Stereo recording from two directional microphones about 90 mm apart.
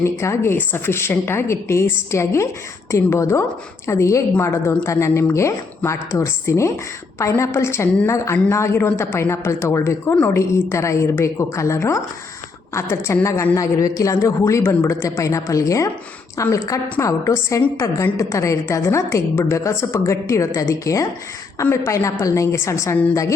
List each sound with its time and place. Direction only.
0.0 s a woman's voice: 30° left (ahead or behind)